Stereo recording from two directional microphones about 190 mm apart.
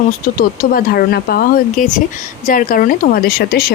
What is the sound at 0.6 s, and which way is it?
Speech, 50° left (ahead or behind).